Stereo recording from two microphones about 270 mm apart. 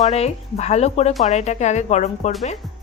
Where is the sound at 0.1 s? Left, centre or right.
Left.